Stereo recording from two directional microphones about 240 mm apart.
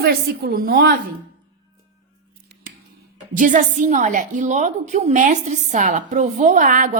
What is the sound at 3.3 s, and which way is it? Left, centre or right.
A woman's voice, right.